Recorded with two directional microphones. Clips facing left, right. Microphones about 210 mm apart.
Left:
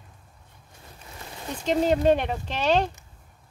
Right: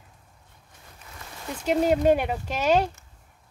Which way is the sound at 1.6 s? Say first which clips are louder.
Even; 10° right (ahead or behind).